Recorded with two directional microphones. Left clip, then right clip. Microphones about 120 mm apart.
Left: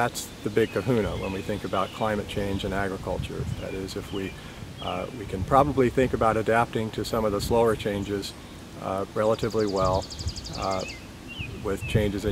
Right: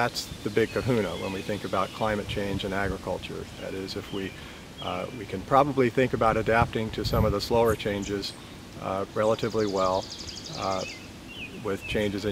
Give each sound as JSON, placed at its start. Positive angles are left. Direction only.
{"t": 0.6, "sound": "speech", "side_deg": 0}
{"t": 4.9, "sound": "speech", "side_deg": 0}
{"t": 11.6, "sound": "speech", "side_deg": 0}